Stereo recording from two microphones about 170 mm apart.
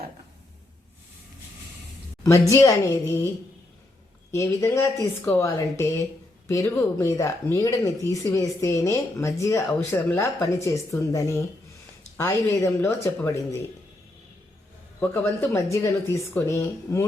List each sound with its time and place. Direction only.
2.5 s speech: 20° left (ahead or behind)
4.3 s speech: 15° left (ahead or behind)
15.0 s speech: 10° left (ahead or behind)